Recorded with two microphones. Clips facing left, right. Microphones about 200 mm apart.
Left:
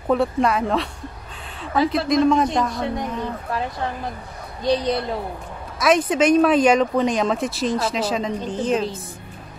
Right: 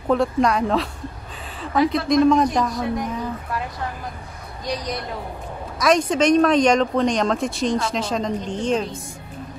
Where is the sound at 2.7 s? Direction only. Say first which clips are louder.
Right 1 dB; 25° left (ahead or behind).